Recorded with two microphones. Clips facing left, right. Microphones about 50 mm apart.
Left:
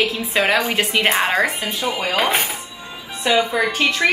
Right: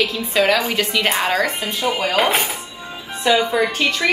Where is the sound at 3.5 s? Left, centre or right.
Centre.